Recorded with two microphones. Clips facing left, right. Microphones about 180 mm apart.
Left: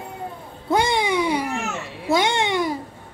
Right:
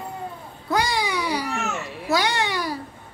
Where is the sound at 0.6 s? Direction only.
25° left (ahead or behind).